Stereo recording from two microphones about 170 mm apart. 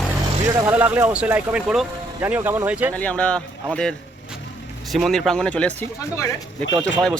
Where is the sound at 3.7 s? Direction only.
5° left (ahead or behind).